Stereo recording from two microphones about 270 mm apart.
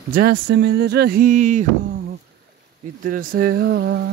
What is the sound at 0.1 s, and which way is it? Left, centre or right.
Speech, right.